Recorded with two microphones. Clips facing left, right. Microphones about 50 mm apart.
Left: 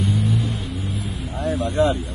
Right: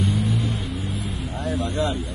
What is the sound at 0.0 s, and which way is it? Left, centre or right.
Vehicle, centre.